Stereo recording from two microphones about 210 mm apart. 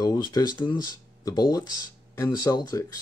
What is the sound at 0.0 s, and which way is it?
Speech, 20° left (ahead or behind).